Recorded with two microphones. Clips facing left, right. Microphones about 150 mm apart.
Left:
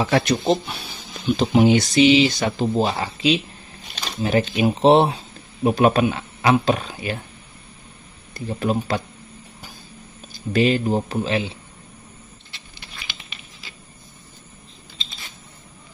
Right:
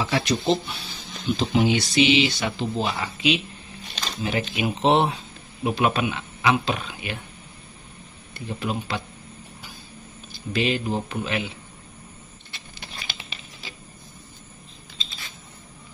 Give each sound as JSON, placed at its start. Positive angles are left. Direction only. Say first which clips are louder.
{"t": 0.0, "sound": "speech", "louder": "left 4 dB", "side_deg": 55}
{"t": 8.5, "sound": "speech", "louder": "left 6 dB", "side_deg": 45}
{"t": 10.3, "sound": "speech", "louder": "left 6 dB", "side_deg": 45}